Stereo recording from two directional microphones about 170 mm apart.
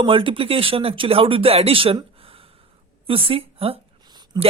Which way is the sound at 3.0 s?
35° right (ahead or behind).